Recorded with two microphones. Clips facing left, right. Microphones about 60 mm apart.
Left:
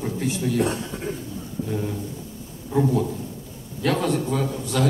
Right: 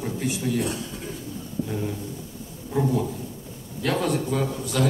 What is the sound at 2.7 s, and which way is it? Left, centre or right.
A man's voice, centre.